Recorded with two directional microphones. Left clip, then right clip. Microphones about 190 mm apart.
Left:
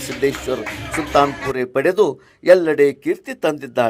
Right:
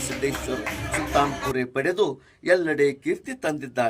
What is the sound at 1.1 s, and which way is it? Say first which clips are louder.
Speech: left 7 dB; 35° left (ahead or behind).